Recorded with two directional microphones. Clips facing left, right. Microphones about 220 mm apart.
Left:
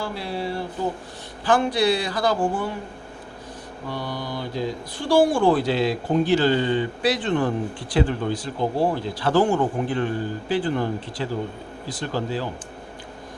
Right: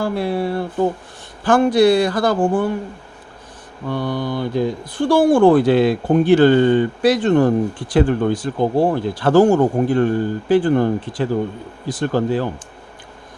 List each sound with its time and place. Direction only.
0.0 s speech: 55° right (ahead or behind)
3.8 s speech: 55° right (ahead or behind)